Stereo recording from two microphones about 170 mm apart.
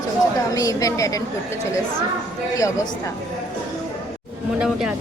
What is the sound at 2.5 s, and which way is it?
Speech, 20° left (ahead or behind).